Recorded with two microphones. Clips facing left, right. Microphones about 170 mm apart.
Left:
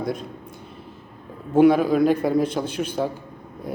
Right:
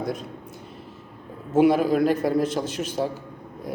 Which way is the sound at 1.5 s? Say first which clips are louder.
Left 2 dB; 5° right (ahead or behind).